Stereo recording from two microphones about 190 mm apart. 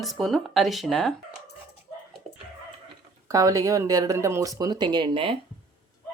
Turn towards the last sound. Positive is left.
turn(degrees=-30)  # may be behind; listen again after turning